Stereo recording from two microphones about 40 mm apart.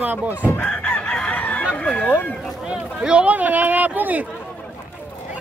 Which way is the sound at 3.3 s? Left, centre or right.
Right.